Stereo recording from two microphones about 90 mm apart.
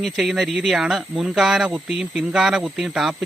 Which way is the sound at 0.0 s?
Centre (ahead or behind).